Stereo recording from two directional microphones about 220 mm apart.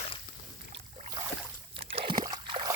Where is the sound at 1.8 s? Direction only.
25° right (ahead or behind).